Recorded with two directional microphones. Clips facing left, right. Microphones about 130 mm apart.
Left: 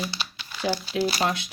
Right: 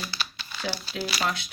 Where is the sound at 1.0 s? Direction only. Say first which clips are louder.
Left 6 dB; 35° left (ahead or behind).